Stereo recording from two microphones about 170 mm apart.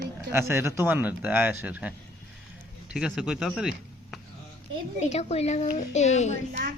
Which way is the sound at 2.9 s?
5° right (ahead or behind).